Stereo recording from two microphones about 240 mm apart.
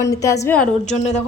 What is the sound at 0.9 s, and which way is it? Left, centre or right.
Speech, left.